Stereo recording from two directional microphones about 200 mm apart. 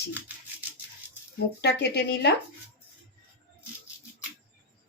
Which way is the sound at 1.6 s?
55° left (ahead or behind).